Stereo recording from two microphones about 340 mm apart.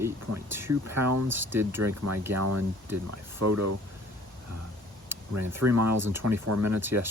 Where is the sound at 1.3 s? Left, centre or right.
Centre.